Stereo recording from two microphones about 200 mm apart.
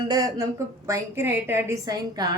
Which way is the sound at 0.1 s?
20° right (ahead or behind).